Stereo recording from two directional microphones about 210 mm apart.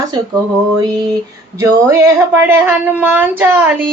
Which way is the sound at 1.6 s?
15° right (ahead or behind).